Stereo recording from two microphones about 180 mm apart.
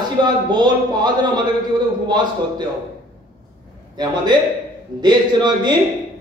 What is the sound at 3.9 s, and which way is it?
A man's voice, 25° right (ahead or behind).